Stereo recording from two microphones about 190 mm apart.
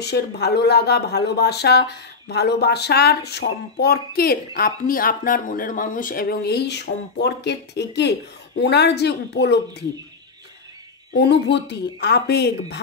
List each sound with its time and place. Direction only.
0.0 s speech: 60° left (ahead or behind)
11.1 s speech: 65° left (ahead or behind)